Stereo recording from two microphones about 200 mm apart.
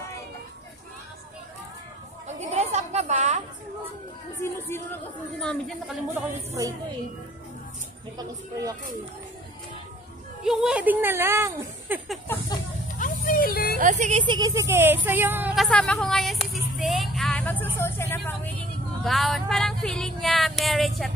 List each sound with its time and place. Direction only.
2.2 s chatter: 35° right (ahead or behind)
4.4 s a sound: 10° left (ahead or behind)
5.4 s speech: 5° left (ahead or behind)
8.2 s speech: 15° right (ahead or behind)
10.4 s speech: 5° right (ahead or behind)
13.0 s music: 45° left (ahead or behind)
13.7 s speech: 35° right (ahead or behind)
14.2 s speech: 20° right (ahead or behind)
15.0 s music: 10° right (ahead or behind); by 17.6 s 10° left (ahead or behind)
17.7 s vehicle: 10° left (ahead or behind)
19.0 s speech: centre (ahead or behind)